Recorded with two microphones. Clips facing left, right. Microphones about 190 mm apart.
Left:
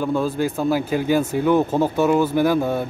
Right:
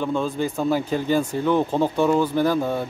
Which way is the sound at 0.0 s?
5° left (ahead or behind).